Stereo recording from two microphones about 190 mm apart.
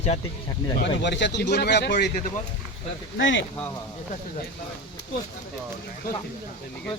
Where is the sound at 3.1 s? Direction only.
75° left (ahead or behind).